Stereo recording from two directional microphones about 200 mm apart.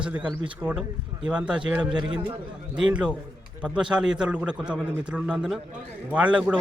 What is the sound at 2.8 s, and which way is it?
A man's voice, 5° right (ahead or behind).